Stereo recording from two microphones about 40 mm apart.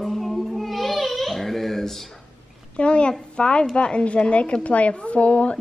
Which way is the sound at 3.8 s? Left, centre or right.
Left.